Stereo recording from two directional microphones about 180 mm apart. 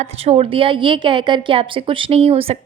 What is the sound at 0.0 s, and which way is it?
A woman's voice, 35° right (ahead or behind).